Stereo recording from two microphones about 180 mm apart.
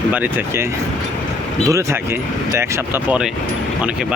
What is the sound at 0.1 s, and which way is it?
Speech, 10° right (ahead or behind).